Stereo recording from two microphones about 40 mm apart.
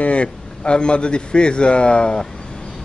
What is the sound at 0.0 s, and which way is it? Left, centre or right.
A man's voice, left.